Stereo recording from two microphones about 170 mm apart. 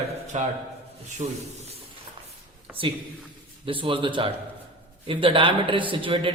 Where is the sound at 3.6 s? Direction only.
30° right (ahead or behind).